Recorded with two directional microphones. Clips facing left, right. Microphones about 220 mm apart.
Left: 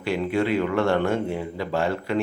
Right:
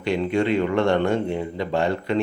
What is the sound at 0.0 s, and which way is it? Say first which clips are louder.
Speech: right 2 dB; 5° left (ahead or behind).